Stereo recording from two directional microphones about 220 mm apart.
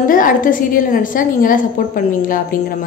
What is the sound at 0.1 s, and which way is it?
A woman's voice, 40° left (ahead or behind).